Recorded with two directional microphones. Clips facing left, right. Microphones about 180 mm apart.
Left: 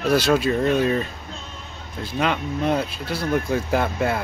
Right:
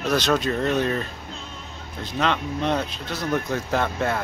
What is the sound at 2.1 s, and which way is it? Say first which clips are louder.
Speech: left 1 dB; 10° left (ahead or behind).